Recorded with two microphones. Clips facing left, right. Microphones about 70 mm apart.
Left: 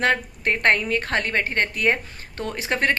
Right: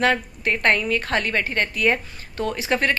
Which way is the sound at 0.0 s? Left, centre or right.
Left.